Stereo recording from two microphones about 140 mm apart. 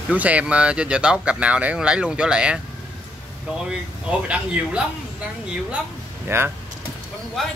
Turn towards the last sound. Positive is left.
turn(degrees=0)  # may be behind; listen again after turning